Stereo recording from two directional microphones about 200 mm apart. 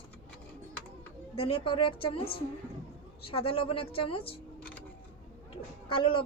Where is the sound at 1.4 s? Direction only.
30° left (ahead or behind).